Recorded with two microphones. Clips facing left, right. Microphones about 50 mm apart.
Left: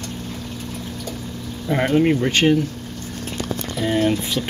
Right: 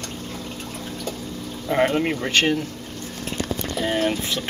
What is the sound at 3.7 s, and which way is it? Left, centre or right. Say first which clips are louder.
Boiling: left 3 dB; centre.